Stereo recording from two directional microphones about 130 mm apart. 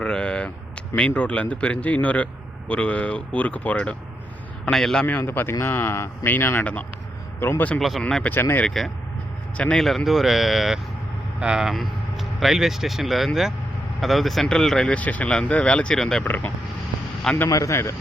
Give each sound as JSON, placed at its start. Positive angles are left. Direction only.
{"t": 0.0, "sound": "a sound", "side_deg": 5}
{"t": 0.9, "sound": "a man's voice", "side_deg": 10}
{"t": 7.8, "sound": "a man's voice", "side_deg": 0}